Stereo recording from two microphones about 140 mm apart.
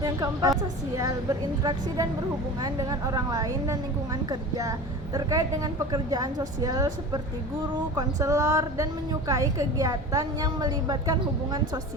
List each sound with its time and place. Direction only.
0.0 s a woman's voice: 25° right (ahead or behind)